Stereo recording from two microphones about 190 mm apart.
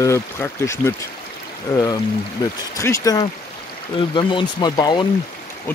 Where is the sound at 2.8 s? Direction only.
15° left (ahead or behind).